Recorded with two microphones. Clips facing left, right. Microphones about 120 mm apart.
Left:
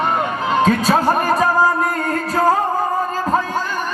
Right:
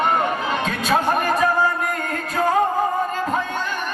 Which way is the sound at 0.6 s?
35° left (ahead or behind).